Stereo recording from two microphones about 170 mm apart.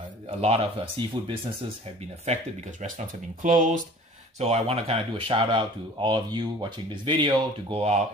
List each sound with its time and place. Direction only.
0.3 s speech: 35° right (ahead or behind)
2.2 s speech: 45° right (ahead or behind)
4.4 s speech: 40° right (ahead or behind)